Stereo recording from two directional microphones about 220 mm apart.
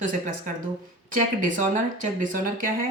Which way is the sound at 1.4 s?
35° right (ahead or behind).